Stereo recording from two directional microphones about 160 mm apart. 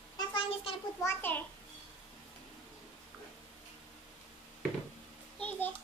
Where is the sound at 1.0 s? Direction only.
15° left (ahead or behind).